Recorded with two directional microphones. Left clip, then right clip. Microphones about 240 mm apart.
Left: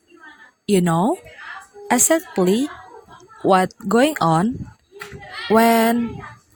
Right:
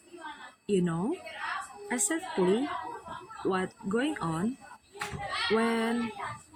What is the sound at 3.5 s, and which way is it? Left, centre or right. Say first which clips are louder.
Speech: left 16 dB; left.